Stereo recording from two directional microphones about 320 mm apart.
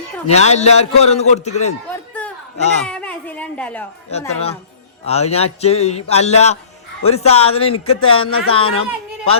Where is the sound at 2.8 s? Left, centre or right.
Centre.